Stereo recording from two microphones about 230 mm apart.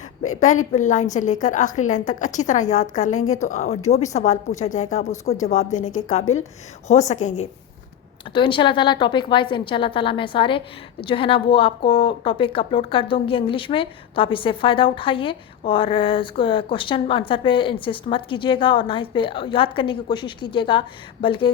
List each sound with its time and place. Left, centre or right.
0.3 s a woman's voice: left